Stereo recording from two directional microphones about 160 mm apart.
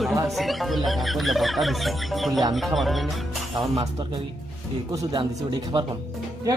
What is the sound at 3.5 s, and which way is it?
Speech, 30° right (ahead or behind).